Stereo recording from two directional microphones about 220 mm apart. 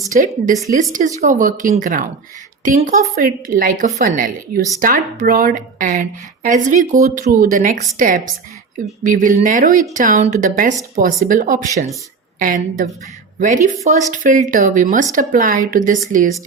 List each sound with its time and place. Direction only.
0.1 s a woman's voice: 40° right (ahead or behind)
3.2 s a woman's voice: 40° right (ahead or behind)